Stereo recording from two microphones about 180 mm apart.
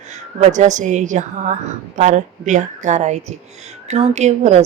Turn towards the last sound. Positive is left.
turn(degrees=-40)  # may be behind; listen again after turning